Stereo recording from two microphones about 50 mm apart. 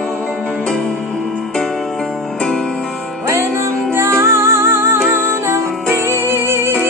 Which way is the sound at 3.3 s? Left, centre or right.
Right.